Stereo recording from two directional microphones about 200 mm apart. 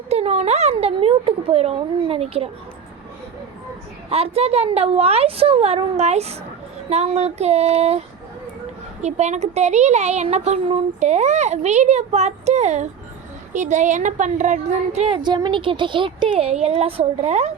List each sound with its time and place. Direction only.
0.1 s speech: 30° right (ahead or behind)
4.1 s speech: 30° right (ahead or behind)
9.0 s speech: 35° right (ahead or behind)